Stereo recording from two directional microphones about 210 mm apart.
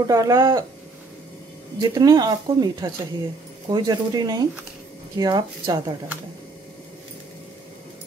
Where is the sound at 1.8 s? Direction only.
20° right (ahead or behind).